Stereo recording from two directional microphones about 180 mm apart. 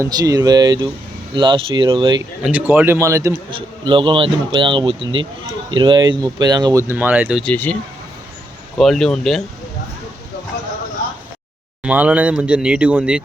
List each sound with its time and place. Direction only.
0.0 s a man's voice: 20° right (ahead or behind)
2.4 s speech: 10° right (ahead or behind)
3.5 s a man's voice: 30° right (ahead or behind); by 7.4 s 10° right (ahead or behind)
7.4 s speech: 10° left (ahead or behind)
8.8 s speech: centre (ahead or behind)
11.8 s speech: 5° right (ahead or behind)